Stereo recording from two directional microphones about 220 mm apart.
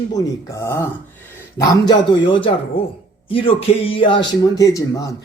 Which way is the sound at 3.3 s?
25° left (ahead or behind).